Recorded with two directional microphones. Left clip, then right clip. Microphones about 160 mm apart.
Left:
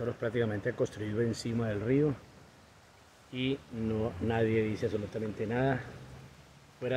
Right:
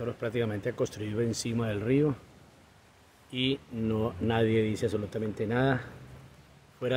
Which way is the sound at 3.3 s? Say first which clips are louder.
Right 4 dB; 25° right (ahead or behind).